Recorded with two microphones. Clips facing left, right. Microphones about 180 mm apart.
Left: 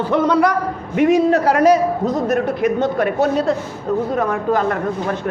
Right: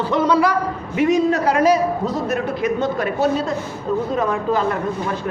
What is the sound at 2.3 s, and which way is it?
Speech, 55° left (ahead or behind).